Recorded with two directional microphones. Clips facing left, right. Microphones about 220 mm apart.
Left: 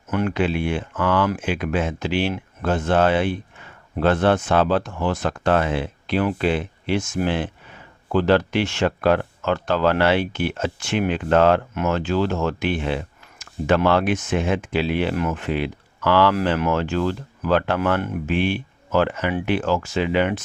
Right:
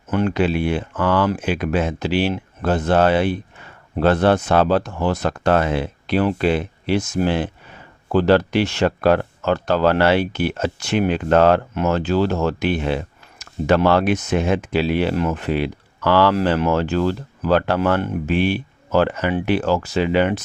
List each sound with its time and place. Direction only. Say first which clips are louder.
0.1 s speech: right 3 dB; 30° right (ahead or behind)